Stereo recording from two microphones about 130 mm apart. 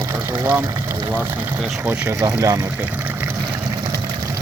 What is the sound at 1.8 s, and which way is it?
Speech, 15° right (ahead or behind).